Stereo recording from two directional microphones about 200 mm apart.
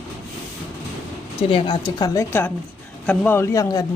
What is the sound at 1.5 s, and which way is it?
A woman's voice, 20° left (ahead or behind).